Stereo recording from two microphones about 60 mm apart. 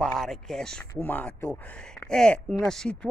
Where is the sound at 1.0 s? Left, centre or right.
Left.